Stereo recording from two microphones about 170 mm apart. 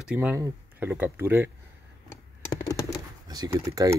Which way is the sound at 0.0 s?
10° right (ahead or behind).